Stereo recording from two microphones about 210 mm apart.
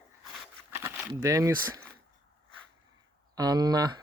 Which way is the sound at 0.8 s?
15° right (ahead or behind).